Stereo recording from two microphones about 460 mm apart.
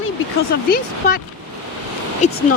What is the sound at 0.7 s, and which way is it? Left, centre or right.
Speech, centre.